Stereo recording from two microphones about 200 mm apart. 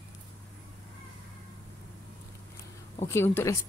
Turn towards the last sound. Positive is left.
turn(degrees=15)  # may be behind; listen again after turning